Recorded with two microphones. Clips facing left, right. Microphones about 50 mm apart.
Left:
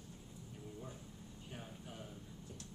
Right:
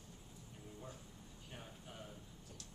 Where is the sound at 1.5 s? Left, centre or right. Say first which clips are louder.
Left 3 dB; centre.